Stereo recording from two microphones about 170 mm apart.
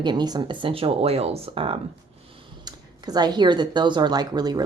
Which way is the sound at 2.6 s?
25° right (ahead or behind).